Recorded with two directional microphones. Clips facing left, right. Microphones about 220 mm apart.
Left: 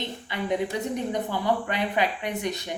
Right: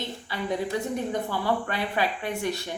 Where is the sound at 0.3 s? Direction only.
20° left (ahead or behind).